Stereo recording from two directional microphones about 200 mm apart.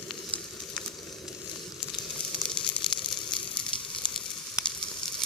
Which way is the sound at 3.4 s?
25° left (ahead or behind).